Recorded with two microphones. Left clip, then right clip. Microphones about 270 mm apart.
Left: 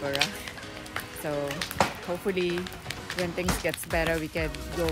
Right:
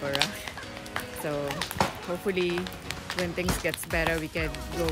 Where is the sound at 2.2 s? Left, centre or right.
Centre.